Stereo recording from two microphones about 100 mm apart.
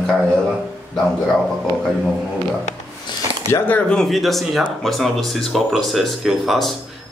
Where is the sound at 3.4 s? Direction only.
20° left (ahead or behind).